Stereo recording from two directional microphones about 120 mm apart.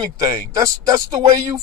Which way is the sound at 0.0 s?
30° right (ahead or behind).